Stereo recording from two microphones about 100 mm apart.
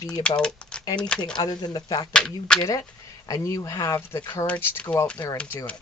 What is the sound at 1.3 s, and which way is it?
Speech, 45° left (ahead or behind).